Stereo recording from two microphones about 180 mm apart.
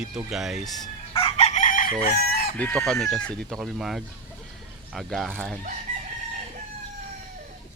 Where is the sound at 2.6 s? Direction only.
5° left (ahead or behind).